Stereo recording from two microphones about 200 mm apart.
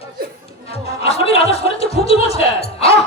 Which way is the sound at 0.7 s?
30° left (ahead or behind).